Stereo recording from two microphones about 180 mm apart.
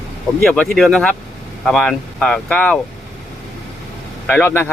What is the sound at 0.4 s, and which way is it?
Speech, 5° left (ahead or behind).